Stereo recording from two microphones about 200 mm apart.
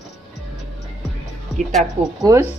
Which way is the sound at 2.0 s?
15° right (ahead or behind).